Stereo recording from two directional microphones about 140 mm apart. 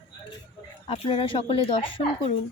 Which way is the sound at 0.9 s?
40° left (ahead or behind).